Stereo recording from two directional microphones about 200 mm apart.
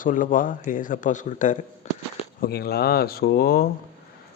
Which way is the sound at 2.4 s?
55° left (ahead or behind).